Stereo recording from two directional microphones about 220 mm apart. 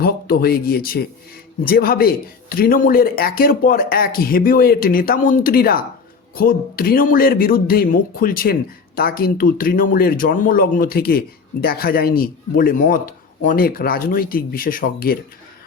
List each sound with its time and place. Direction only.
0.0 s speech: 45° left (ahead or behind)